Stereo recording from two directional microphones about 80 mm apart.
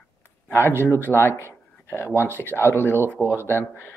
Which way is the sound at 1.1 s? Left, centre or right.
Left.